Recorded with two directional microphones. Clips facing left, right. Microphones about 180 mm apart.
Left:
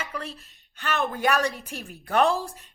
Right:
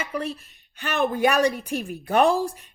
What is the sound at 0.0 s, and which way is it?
A woman's voice, 15° right (ahead or behind).